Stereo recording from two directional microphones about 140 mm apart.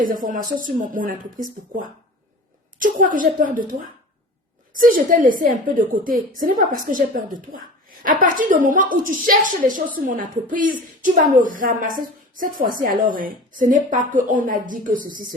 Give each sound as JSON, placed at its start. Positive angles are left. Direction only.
{"t": 0.0, "sound": "a woman's voice", "side_deg": -75}